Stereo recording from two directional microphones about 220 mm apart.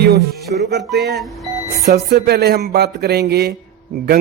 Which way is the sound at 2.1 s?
45° right (ahead or behind).